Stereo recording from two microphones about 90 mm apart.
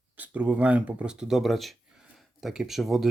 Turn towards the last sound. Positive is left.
turn(degrees=0)  # may be behind; listen again after turning